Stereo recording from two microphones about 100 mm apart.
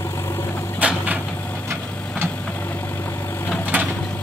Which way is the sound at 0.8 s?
15° right (ahead or behind).